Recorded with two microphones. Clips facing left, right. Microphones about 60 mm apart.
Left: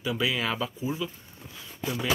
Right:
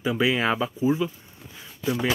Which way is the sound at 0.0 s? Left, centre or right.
Right.